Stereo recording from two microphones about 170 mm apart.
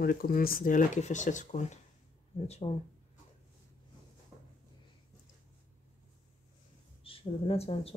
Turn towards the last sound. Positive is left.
turn(degrees=35)  # may be behind; listen again after turning